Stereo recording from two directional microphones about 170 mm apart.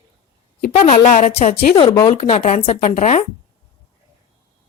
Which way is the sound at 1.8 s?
20° left (ahead or behind).